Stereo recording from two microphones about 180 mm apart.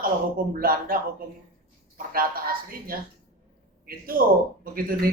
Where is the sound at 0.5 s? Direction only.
55° right (ahead or behind).